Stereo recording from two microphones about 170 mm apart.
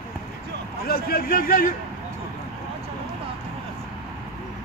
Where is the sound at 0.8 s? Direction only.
60° left (ahead or behind).